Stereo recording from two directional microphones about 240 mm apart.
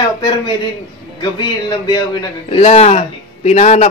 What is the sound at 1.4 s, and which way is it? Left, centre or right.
A man's voice, centre.